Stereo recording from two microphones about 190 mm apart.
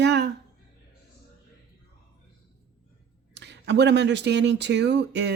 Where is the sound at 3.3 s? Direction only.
65° right (ahead or behind).